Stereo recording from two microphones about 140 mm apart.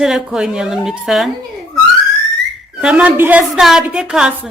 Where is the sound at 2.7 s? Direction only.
10° right (ahead or behind).